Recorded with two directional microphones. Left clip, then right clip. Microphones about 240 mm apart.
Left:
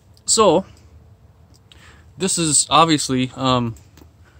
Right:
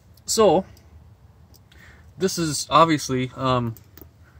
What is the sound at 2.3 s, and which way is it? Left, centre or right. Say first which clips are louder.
Speech: left 3 dB; centre.